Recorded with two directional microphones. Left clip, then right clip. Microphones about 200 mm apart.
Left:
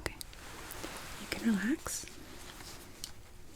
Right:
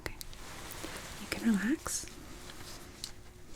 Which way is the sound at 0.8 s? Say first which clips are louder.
Even; 15° left (ahead or behind).